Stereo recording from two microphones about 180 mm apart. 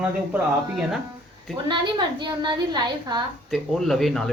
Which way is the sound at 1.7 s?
25° right (ahead or behind).